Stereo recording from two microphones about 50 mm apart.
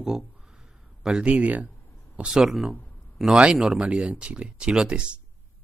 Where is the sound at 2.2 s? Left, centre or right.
Centre.